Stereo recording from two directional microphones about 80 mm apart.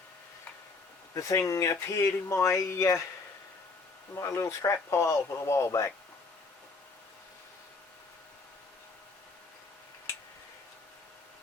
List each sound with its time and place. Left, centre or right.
1.1 s speech: left
4.1 s speech: left